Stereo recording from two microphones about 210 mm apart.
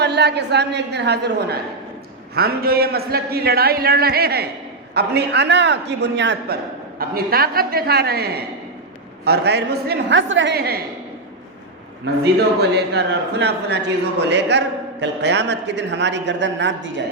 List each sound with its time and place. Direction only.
0.0 s a man's voice: 50° right (ahead or behind)
7.0 s a man's voice: 45° right (ahead or behind)
12.0 s a man's voice: 50° right (ahead or behind)